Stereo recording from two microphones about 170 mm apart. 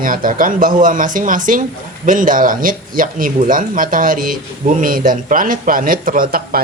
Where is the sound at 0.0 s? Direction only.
55° right (ahead or behind).